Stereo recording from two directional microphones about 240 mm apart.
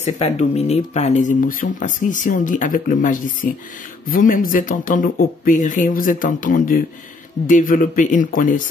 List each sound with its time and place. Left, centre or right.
0.0 s speech: left